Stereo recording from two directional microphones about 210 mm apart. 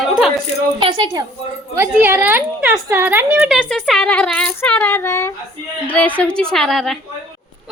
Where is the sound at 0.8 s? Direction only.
25° right (ahead or behind).